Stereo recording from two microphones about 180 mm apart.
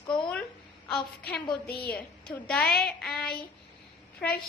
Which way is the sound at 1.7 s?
60° left (ahead or behind).